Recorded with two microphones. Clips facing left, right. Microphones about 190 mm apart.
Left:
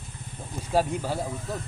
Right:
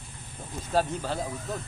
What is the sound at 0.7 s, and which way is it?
Speech, 10° left (ahead or behind).